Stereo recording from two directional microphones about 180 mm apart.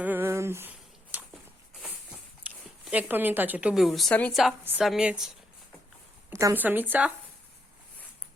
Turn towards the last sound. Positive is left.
turn(degrees=-10)  # may be behind; listen again after turning